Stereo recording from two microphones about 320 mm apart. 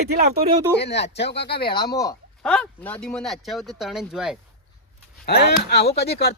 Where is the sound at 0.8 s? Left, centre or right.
Left.